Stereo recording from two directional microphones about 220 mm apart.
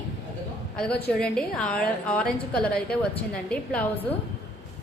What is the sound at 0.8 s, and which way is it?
A woman's voice, 5° left (ahead or behind).